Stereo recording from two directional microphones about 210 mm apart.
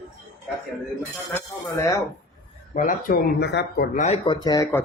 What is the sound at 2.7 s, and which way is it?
Speech, 40° left (ahead or behind).